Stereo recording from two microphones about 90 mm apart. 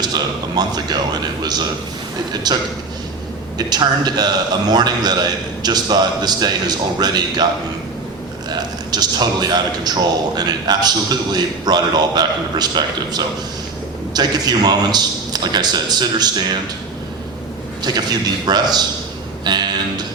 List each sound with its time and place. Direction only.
0.0 s a man's voice: 50° right (ahead or behind)
3.7 s a man's voice: 50° right (ahead or behind)
8.4 s a man's voice: 50° right (ahead or behind)
17.9 s a man's voice: 50° right (ahead or behind)